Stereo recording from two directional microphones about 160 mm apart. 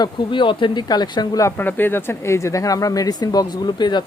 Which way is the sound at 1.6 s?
10° left (ahead or behind).